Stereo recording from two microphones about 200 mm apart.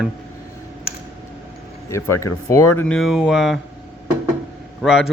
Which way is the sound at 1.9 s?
15° left (ahead or behind).